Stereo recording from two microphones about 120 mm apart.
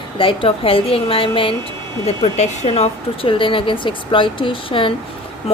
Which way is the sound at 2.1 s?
65° left (ahead or behind).